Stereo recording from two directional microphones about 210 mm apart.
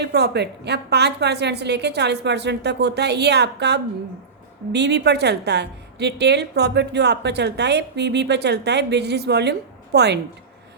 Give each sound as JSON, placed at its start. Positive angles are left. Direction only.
{"t": 0.0, "sound": "a woman's voice", "side_deg": -50}